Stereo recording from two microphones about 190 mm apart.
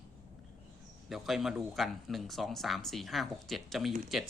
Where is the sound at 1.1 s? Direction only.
Centre (ahead or behind).